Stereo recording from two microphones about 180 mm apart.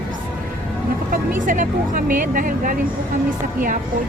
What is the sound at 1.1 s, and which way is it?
Speech, 50° right (ahead or behind).